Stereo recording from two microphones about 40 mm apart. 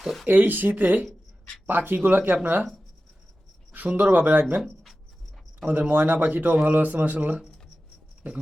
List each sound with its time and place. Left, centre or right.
0.0 s a sound: centre
0.3 s speech: right
1.6 s speech: right
3.9 s speech: right
5.9 s speech: right